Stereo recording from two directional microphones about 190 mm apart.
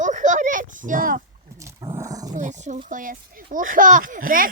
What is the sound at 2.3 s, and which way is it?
Speech, 40° right (ahead or behind).